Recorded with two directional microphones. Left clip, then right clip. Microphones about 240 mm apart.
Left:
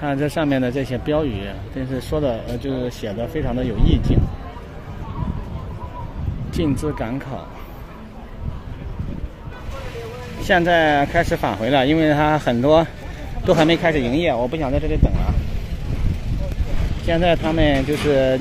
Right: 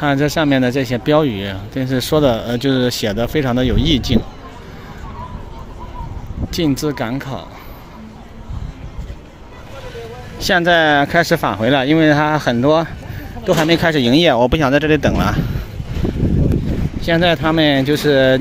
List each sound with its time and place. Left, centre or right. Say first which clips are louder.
0.0 s speech: right 5 dB; centre
6.5 s speech: right 4 dB; centre
10.4 s speech: right 3 dB; right
13.8 s speech: right 5 dB; right
17.0 s speech: right 3 dB; centre